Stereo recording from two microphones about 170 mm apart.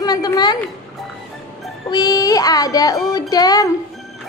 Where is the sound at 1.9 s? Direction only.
25° left (ahead or behind).